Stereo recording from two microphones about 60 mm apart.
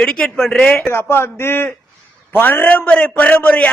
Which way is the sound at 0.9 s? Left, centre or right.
Left.